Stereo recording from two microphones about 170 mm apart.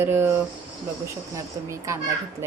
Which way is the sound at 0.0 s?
15° right (ahead or behind).